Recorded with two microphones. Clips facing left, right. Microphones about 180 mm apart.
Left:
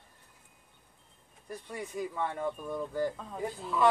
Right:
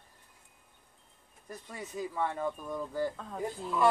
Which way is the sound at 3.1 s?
5° left (ahead or behind).